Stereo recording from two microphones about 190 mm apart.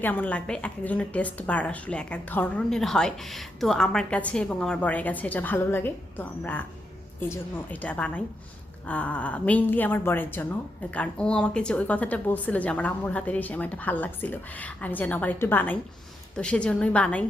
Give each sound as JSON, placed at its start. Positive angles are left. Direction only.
{"t": 0.0, "sound": "a woman's voice", "side_deg": 10}